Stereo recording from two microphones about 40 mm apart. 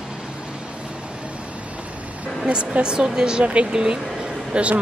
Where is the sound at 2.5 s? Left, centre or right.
Right.